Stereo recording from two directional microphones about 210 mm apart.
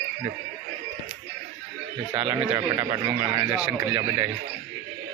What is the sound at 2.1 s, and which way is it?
A man's voice, 25° right (ahead or behind).